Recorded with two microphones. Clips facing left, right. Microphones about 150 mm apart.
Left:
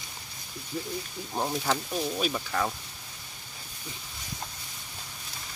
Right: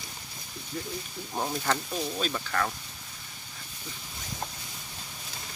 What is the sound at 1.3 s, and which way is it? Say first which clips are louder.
Speech: left 1 dB; 5° left (ahead or behind).